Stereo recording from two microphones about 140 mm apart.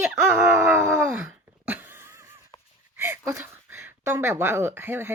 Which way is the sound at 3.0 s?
15° right (ahead or behind).